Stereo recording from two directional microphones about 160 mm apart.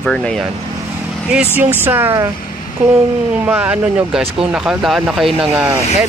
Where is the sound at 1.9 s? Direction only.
15° right (ahead or behind).